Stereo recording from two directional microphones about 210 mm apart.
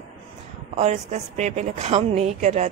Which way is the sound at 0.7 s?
30° right (ahead or behind).